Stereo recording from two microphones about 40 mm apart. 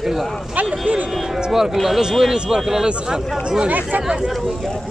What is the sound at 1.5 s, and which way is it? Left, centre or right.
Speech, centre.